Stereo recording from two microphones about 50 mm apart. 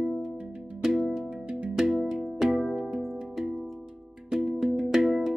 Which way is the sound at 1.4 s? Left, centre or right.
Right.